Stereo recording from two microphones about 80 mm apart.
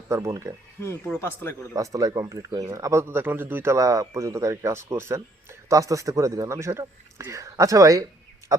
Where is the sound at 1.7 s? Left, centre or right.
Right.